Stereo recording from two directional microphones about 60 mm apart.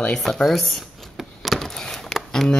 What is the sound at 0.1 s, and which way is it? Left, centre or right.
Speech, centre.